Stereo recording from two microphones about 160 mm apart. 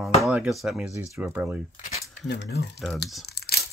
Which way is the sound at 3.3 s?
80° left.